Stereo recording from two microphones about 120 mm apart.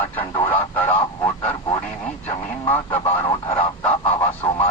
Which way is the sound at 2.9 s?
15° left (ahead or behind).